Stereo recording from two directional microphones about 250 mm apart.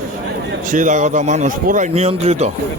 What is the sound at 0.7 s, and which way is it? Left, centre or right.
A man's voice, right.